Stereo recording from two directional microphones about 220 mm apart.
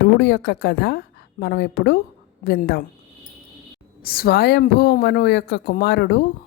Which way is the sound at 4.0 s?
40° left (ahead or behind).